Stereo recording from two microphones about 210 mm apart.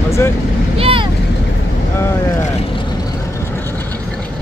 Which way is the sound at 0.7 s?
25° right (ahead or behind).